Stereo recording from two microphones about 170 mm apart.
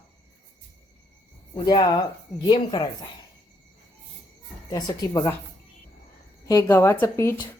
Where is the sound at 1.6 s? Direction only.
25° left (ahead or behind).